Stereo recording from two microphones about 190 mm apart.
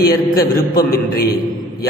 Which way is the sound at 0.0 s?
50° left (ahead or behind).